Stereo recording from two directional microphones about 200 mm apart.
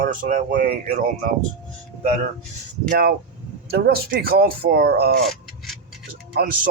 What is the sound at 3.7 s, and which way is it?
Speech, 50° right (ahead or behind).